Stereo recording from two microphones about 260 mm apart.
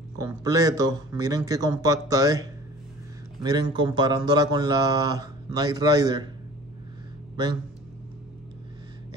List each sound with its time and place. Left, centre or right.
0.2 s speech: centre
3.4 s speech: centre